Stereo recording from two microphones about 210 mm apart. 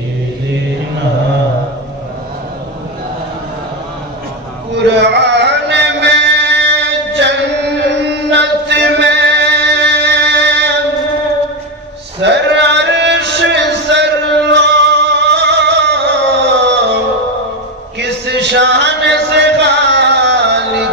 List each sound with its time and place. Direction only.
4.7 s music: 55° right (ahead or behind)
12.2 s male singing: 55° right (ahead or behind)
17.9 s a sound: 55° right (ahead or behind)